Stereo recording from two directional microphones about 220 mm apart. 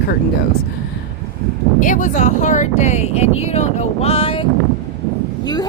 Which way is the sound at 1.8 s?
35° left (ahead or behind).